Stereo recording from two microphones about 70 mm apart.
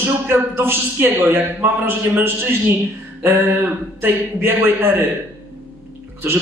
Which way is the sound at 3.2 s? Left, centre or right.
Right.